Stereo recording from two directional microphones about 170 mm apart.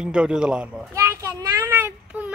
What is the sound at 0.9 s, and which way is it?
A child's voice, 15° right (ahead or behind).